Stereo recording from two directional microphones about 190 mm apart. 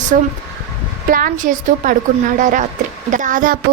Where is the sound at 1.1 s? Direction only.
45° right (ahead or behind).